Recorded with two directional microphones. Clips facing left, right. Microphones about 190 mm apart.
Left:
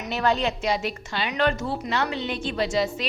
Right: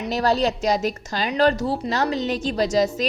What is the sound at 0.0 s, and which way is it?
A woman's voice, 40° right (ahead or behind).